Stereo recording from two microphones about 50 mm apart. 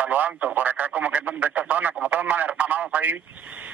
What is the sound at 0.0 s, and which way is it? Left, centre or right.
A man's voice, right.